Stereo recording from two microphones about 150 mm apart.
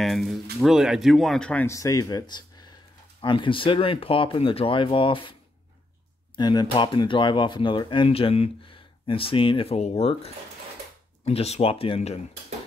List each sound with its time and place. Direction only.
0.0 s speech: centre (ahead or behind)
1.7 s speech: 20° left (ahead or behind)
6.3 s speech: 30° left (ahead or behind)